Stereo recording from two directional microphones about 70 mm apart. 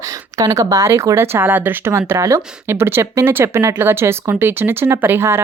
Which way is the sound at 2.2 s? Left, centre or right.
Right.